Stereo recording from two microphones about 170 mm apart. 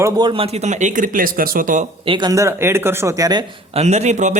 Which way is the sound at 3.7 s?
40° right (ahead or behind).